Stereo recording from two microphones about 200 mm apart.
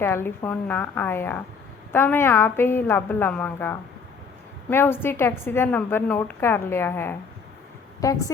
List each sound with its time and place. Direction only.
0.0 s a woman's voice: 10° left (ahead or behind)